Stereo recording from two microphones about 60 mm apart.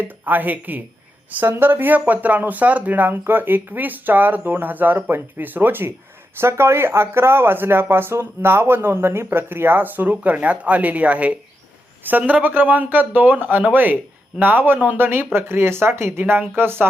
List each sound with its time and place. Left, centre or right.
0.0 s speech: right